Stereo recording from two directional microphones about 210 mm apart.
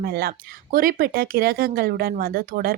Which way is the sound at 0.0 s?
50° right (ahead or behind).